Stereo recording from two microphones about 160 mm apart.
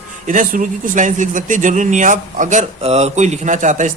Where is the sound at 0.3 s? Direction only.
55° right (ahead or behind).